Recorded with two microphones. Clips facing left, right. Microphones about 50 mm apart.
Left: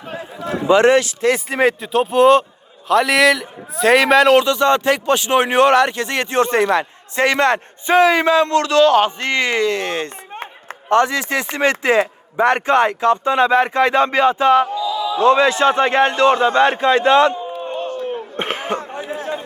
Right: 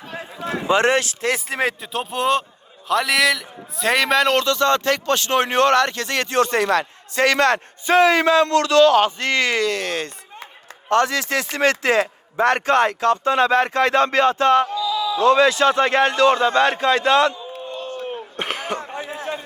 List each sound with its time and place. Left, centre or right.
0.4 s a man's voice: right
1.5 s a man's voice: centre
4.4 s speech: centre
14.8 s speech: left
17.3 s a sound: left
18.3 s speech: left
19.1 s chatter: left